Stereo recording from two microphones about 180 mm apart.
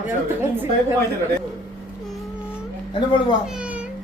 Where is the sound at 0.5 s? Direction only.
10° right (ahead or behind).